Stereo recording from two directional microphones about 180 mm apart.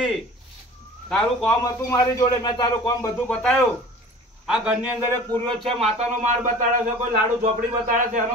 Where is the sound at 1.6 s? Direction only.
20° left (ahead or behind); by 5.0 s 5° right (ahead or behind).